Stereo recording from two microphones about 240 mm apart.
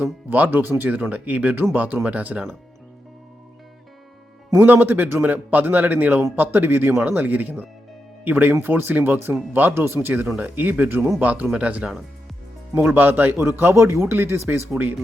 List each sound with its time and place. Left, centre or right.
0.0 s speech: centre
4.5 s speech: centre